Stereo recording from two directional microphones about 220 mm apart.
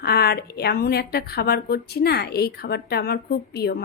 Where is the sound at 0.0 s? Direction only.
45° left (ahead or behind).